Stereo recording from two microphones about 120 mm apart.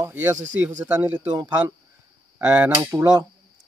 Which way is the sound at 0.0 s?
20° right (ahead or behind).